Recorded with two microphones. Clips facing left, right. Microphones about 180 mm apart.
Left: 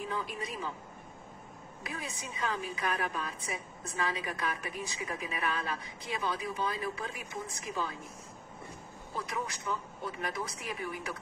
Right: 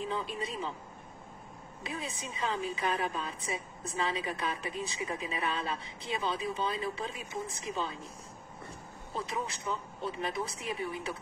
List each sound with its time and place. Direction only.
0.0 s speech: 25° right (ahead or behind)
1.8 s a woman's voice: 25° right (ahead or behind)
9.1 s a woman's voice: 25° right (ahead or behind)